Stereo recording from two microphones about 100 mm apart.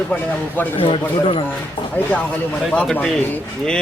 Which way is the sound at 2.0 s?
15° left (ahead or behind).